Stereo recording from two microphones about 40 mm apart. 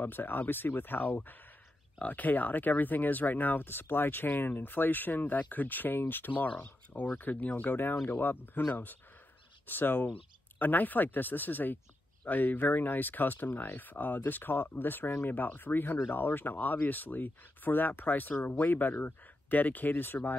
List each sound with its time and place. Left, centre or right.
0.0 s speech: left
18.6 s speech: left